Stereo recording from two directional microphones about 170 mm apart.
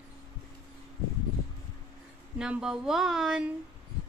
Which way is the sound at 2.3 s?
5° right (ahead or behind).